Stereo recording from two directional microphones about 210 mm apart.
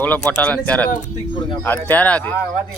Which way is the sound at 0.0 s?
5° left (ahead or behind).